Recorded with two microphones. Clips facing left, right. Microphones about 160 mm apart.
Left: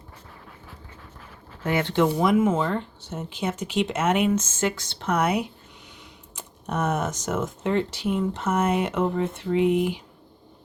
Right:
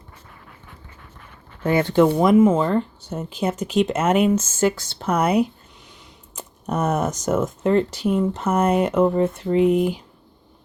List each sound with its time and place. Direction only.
1.6 s speech: 40° right (ahead or behind)
2.0 s speech: 55° right (ahead or behind)
2.4 s speech: 35° right (ahead or behind)